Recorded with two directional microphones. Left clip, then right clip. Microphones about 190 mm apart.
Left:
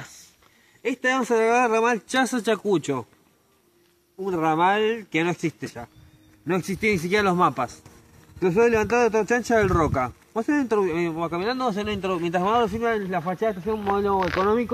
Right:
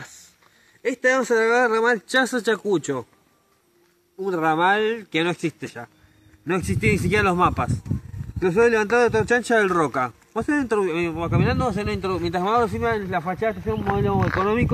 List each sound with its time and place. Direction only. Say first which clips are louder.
1.0 s speech: right 2 dB; 25° left (ahead or behind)
4.2 s speech: right 1 dB; 25° left (ahead or behind); by 13.9 s 5° right (ahead or behind)